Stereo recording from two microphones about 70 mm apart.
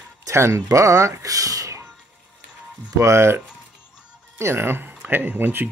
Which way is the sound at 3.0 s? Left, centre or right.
Right.